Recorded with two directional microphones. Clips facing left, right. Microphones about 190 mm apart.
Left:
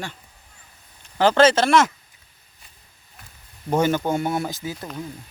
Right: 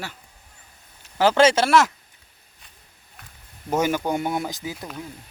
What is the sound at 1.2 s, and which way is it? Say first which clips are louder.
Speech: left 1 dB; 10° right (ahead or behind).